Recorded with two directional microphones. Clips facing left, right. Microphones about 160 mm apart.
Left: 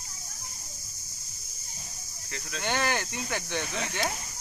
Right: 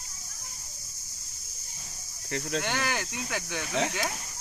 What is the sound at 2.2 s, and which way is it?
Speech, 55° right (ahead or behind).